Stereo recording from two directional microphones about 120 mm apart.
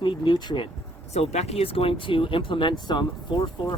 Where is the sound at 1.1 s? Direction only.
60° left (ahead or behind); by 3.7 s 40° left (ahead or behind).